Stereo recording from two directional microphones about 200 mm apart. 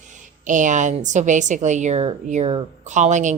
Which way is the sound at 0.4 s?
40° right (ahead or behind).